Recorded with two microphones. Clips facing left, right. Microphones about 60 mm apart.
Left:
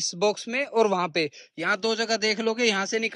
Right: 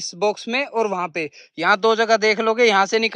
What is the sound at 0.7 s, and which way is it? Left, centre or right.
Speech, right.